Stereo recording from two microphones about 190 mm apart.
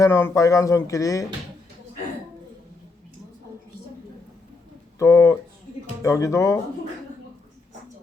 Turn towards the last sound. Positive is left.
turn(degrees=15)  # may be behind; listen again after turning